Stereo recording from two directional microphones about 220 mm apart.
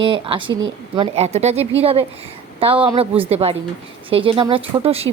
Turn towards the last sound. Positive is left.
turn(degrees=-25)  # may be behind; listen again after turning